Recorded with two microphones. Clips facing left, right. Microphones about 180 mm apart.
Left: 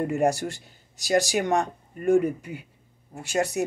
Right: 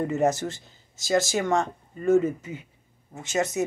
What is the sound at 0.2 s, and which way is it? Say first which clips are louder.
Speech: even; 15° left (ahead or behind).